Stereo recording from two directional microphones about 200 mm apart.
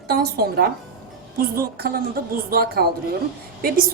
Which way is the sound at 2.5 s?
50° right (ahead or behind).